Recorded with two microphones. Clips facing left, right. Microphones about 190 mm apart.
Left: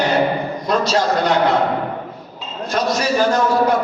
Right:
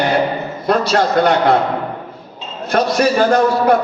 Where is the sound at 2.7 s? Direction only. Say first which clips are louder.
Right 4 dB; 60° right (ahead or behind).